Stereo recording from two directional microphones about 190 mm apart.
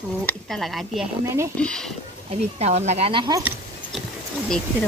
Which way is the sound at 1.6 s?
5° left (ahead or behind).